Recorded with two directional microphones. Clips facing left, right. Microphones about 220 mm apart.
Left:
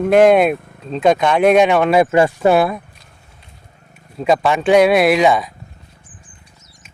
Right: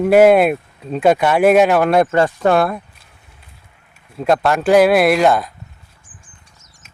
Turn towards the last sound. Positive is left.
turn(degrees=0)  # may be behind; listen again after turning